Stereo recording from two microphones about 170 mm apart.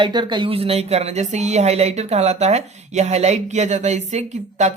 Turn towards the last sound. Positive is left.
turn(degrees=-45)  # may be behind; listen again after turning